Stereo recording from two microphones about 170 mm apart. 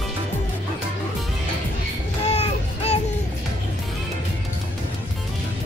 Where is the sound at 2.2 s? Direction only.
40° left (ahead or behind).